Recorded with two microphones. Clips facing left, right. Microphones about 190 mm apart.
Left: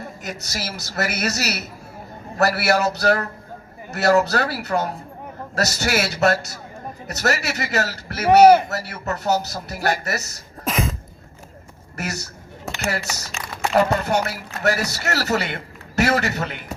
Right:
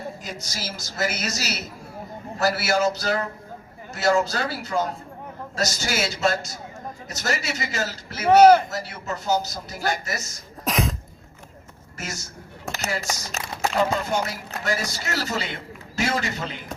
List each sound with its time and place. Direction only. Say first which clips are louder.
0.2 s a man's voice: left 4 dB; 65° left (ahead or behind)
10.6 s a sound: left 1 dB; centre (ahead or behind)
11.9 s speech: left 6 dB; 65° left (ahead or behind)
12.7 s a sound: left 1 dB; centre (ahead or behind)
13.4 s speech: right 1 dB; 40° right (ahead or behind)
13.7 s speech: left 5 dB; 65° left (ahead or behind)